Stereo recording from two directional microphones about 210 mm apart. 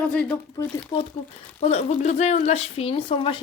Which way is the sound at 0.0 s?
5° left (ahead or behind).